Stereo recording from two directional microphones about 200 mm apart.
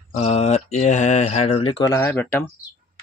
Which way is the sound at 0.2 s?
30° left (ahead or behind).